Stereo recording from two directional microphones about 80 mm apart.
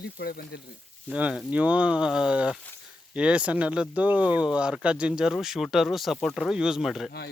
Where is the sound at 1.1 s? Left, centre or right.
Centre.